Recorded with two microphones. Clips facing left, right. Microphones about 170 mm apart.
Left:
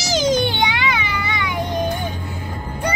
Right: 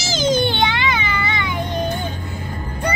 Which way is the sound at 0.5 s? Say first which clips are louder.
Right 1 dB; 15° left (ahead or behind).